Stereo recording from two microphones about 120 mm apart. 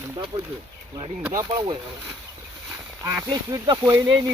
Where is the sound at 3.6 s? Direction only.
35° right (ahead or behind).